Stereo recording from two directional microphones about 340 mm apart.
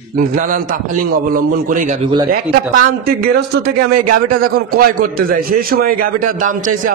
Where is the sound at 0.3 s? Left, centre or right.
Right.